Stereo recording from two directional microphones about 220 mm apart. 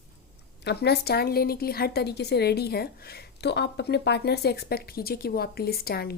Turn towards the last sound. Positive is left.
turn(degrees=45)  # may be behind; listen again after turning